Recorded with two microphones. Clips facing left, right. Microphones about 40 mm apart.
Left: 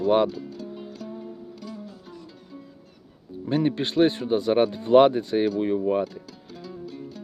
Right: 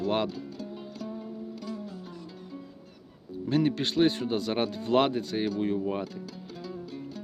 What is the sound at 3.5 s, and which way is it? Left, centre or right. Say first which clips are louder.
Speech: left 2 dB; centre.